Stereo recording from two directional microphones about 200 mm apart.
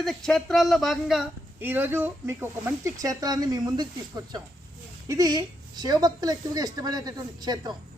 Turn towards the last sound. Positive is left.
turn(degrees=-20)  # may be behind; listen again after turning